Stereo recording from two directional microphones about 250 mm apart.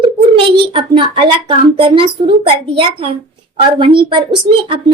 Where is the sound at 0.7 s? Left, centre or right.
Right.